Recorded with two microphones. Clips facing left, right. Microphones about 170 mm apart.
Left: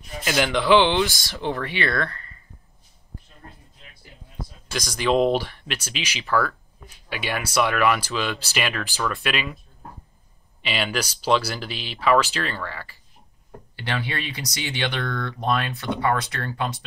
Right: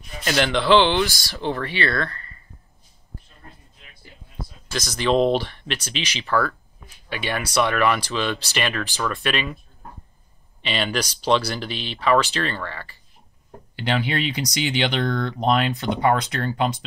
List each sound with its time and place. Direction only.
0.2 s speech: 10° left (ahead or behind)
4.9 s speech: 10° left (ahead or behind)
10.6 s speech: 5° left (ahead or behind)
13.8 s speech: 15° right (ahead or behind)